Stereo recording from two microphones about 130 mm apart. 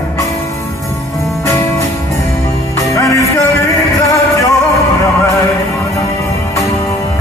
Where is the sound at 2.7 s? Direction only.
25° left (ahead or behind).